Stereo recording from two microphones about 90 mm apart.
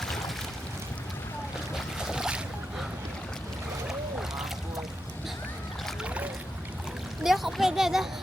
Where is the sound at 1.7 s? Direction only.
5° right (ahead or behind).